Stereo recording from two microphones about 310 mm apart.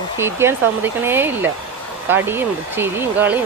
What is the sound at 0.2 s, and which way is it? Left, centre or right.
Speech, centre.